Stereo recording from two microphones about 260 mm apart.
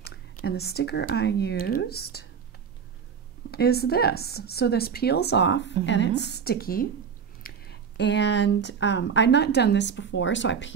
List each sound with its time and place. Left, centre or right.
0.0 s speech: left
3.5 s speech: left